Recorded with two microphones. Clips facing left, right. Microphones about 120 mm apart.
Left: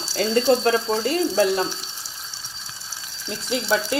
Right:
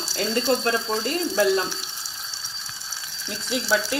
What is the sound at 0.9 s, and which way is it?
Speech, 5° left (ahead or behind).